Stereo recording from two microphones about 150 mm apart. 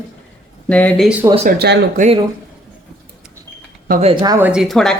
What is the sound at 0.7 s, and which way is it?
Speech, 10° left (ahead or behind).